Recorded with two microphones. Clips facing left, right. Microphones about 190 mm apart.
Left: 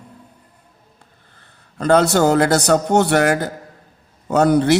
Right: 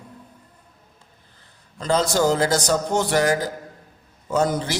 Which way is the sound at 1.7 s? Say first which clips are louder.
Left 6 dB; 65° left (ahead or behind).